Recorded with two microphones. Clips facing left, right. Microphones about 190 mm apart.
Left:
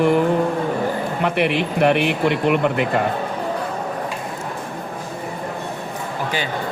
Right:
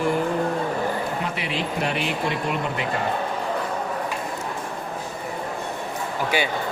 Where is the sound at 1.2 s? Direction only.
60° left (ahead or behind).